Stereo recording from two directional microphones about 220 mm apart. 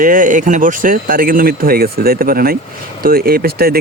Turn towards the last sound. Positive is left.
turn(degrees=-45)  # may be behind; listen again after turning